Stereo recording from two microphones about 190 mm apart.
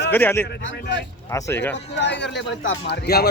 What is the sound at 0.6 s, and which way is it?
Speech, 70° left (ahead or behind).